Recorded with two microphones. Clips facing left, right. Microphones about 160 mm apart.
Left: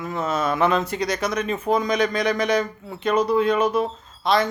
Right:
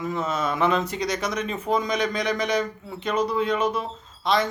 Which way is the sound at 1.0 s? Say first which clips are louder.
Left 2 dB; 5° left (ahead or behind).